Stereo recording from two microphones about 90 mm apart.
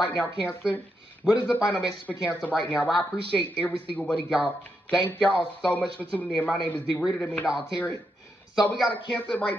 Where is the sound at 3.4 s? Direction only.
20° left (ahead or behind).